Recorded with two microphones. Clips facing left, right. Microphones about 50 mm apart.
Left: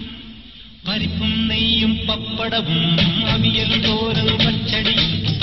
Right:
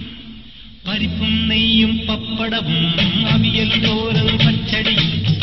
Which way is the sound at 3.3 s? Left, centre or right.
Right.